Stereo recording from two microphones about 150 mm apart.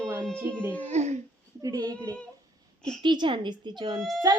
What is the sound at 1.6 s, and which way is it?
Speech, 25° right (ahead or behind).